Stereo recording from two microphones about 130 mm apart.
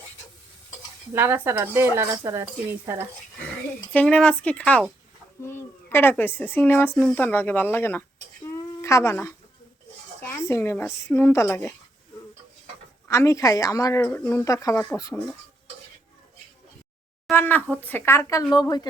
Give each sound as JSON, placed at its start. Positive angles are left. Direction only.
{"t": 1.1, "sound": "speech", "side_deg": -15}
{"t": 3.9, "sound": "speech", "side_deg": 10}
{"t": 13.1, "sound": "speech", "side_deg": 25}
{"t": 17.3, "sound": "a woman's voice", "side_deg": 15}